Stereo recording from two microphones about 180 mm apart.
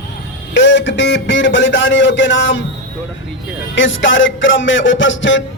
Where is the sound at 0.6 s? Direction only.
90° left.